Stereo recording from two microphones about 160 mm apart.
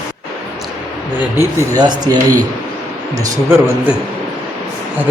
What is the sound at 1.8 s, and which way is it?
Speech, 25° right (ahead or behind).